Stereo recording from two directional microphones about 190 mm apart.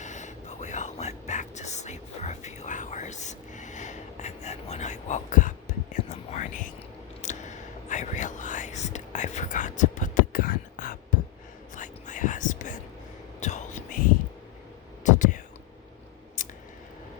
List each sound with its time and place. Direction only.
0.0 s whispering: 40° left (ahead or behind)
15.0 s a sound: 40° left (ahead or behind)
16.4 s scissors: 40° left (ahead or behind)